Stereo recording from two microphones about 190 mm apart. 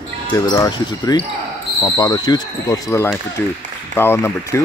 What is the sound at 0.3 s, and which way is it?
Speech, 20° left (ahead or behind).